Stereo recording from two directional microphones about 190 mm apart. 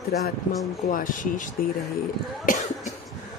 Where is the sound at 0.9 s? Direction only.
45° left (ahead or behind).